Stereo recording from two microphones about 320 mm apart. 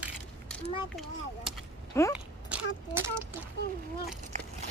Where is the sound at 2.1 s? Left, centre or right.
Centre.